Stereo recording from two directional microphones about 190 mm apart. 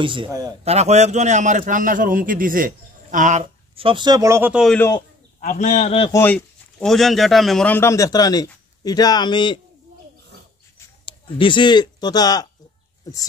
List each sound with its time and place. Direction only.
0.0 s a man's voice: 25° right (ahead or behind)
0.7 s a man's voice: 35° right (ahead or behind); by 4.6 s 10° right (ahead or behind)
4.6 s speech: 10° left (ahead or behind)
5.4 s a man's voice: 40° left (ahead or behind)
6.1 s speech: 10° left (ahead or behind); by 9.6 s 25° left (ahead or behind)
11.1 s speech: 25° left (ahead or behind)